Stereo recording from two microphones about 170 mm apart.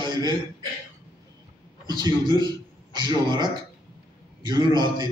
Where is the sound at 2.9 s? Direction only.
25° right (ahead or behind).